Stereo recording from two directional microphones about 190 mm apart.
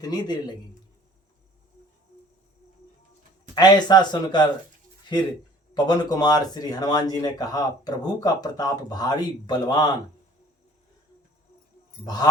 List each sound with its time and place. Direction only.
0.0 s speech: 20° left (ahead or behind)
3.5 s speech: 20° left (ahead or behind)
5.7 s speech: 20° left (ahead or behind)
12.0 s speech: 20° left (ahead or behind)